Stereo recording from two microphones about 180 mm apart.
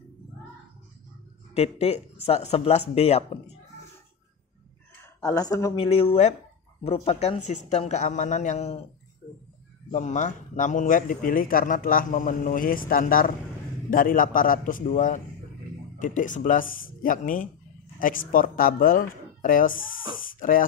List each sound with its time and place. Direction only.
1.5 s speech: 35° left (ahead or behind)
5.0 s speech: 15° left (ahead or behind)
5.8 s speech: 35° left (ahead or behind)
9.9 s a man's voice: 45° left (ahead or behind)